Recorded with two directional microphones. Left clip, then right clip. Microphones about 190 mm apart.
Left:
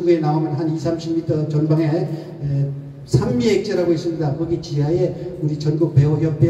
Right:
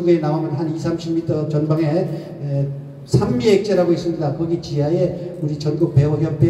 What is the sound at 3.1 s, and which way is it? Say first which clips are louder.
A man's voice: right 2 dB; 30° right (ahead or behind).